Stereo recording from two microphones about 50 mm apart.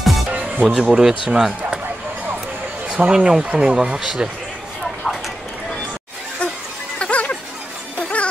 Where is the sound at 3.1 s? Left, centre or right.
Centre.